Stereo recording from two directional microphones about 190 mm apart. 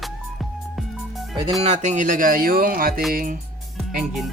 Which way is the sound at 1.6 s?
35° right (ahead or behind).